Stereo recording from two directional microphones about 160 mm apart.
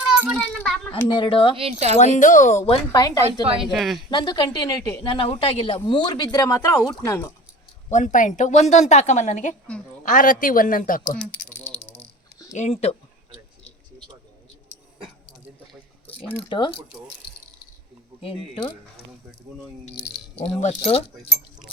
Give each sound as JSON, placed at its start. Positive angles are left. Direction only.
{"t": 0.3, "sound": "children playing", "side_deg": 5}
{"t": 1.0, "sound": "speech", "side_deg": 30}
{"t": 1.5, "sound": "speech", "side_deg": -40}
{"t": 2.1, "sound": "a woman's voice", "side_deg": 50}
{"t": 2.6, "sound": "speech", "side_deg": 30}
{"t": 3.6, "sound": "a woman's voice", "side_deg": 0}
{"t": 4.1, "sound": "speech", "side_deg": 30}
{"t": 7.9, "sound": "a woman's voice", "side_deg": 50}
{"t": 11.2, "sound": "rattle", "side_deg": 10}
{"t": 12.5, "sound": "speech", "side_deg": 40}
{"t": 16.3, "sound": "speech", "side_deg": 35}
{"t": 18.2, "sound": "speech", "side_deg": 35}
{"t": 20.4, "sound": "speech", "side_deg": 45}